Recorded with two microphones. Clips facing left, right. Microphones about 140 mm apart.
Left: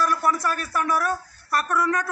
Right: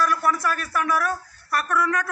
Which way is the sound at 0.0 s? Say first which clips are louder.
Even; 30° left (ahead or behind).